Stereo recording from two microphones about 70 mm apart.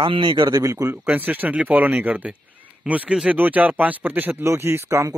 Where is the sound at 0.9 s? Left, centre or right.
Right.